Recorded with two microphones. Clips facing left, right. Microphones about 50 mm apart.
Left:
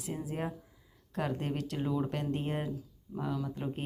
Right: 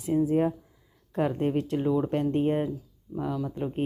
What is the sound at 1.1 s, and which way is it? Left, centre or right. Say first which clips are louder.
Speech: right 8 dB; centre.